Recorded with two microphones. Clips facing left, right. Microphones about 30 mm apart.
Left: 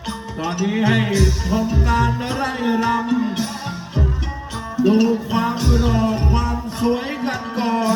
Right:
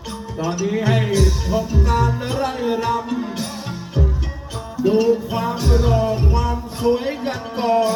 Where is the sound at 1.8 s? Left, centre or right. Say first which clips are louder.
Left 1 dB; left.